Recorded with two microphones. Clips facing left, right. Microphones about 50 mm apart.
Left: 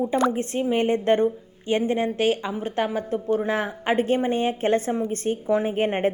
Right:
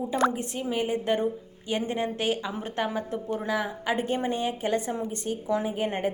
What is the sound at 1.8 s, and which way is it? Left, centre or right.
A woman's voice, left.